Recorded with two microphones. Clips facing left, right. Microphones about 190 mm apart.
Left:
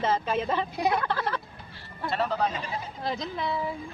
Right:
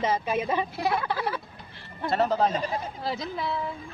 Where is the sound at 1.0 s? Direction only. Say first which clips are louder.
Even; 10° right (ahead or behind).